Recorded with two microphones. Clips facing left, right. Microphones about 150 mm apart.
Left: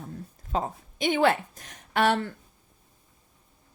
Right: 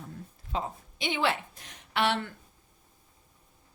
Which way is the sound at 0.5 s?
45° left (ahead or behind).